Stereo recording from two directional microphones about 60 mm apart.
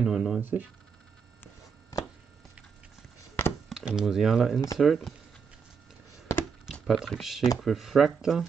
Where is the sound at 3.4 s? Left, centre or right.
Left.